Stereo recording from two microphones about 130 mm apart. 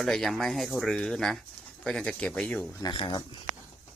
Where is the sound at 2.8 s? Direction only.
40° left (ahead or behind).